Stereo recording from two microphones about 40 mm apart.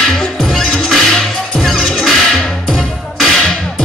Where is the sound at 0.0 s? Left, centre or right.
Centre.